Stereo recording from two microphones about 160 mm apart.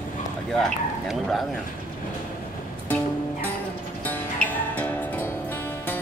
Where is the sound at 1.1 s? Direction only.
Centre (ahead or behind).